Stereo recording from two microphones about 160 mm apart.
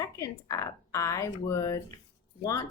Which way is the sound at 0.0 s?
20° left (ahead or behind).